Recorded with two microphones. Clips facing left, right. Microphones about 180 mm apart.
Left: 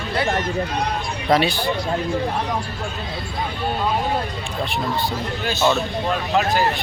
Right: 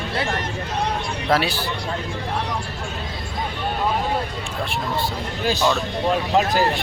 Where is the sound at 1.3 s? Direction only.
5° right (ahead or behind).